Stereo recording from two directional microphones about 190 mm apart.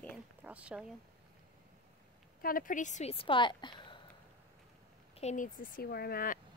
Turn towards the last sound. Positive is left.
turn(degrees=50)  # may be behind; listen again after turning